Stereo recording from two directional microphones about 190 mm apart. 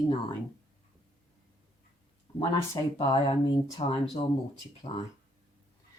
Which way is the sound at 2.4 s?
25° left (ahead or behind).